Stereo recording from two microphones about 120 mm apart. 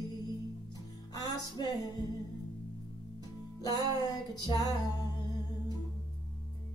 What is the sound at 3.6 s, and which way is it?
Music, 35° left (ahead or behind).